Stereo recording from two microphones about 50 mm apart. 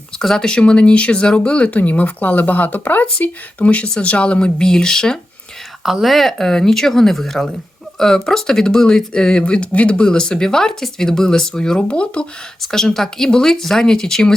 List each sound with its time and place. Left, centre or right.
0.2 s speech: centre
5.8 s speech: centre; by 12.2 s left
12.6 s speech: centre